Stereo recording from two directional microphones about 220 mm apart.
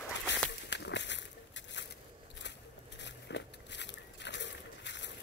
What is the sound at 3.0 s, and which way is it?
Biting, 50° left (ahead or behind).